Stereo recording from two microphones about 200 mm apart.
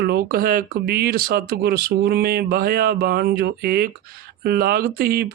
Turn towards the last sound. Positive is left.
turn(degrees=-50)  # may be behind; listen again after turning